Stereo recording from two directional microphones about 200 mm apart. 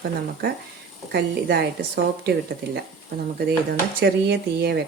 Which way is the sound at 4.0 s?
55° right (ahead or behind).